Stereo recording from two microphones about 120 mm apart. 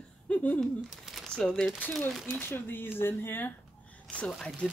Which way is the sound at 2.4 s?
15° left (ahead or behind).